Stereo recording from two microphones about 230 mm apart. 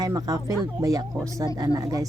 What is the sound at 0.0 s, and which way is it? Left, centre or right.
Speech, centre.